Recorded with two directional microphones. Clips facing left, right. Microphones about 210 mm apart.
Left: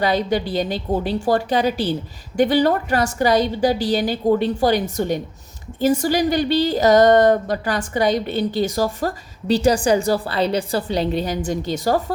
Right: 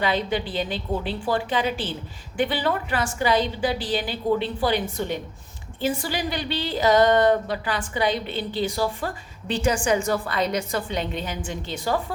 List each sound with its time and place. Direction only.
0.0 s a woman's voice: 40° left (ahead or behind)